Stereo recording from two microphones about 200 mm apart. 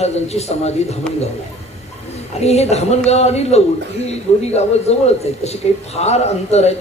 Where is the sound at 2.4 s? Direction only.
30° left (ahead or behind).